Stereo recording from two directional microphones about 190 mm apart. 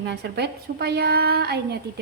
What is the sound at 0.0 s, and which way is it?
A woman's voice, 60° right (ahead or behind).